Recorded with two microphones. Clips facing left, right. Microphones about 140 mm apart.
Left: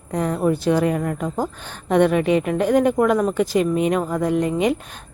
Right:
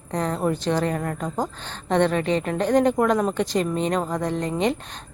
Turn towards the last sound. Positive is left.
turn(degrees=10)  # may be behind; listen again after turning